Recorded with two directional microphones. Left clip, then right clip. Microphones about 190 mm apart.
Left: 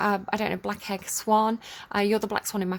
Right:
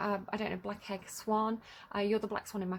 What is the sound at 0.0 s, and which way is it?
A woman's voice, 40° left (ahead or behind).